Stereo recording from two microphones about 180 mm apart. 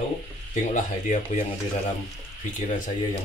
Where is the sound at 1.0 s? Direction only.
45° left (ahead or behind).